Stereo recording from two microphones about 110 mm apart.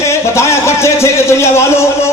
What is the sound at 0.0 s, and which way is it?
A man's voice, 25° left (ahead or behind).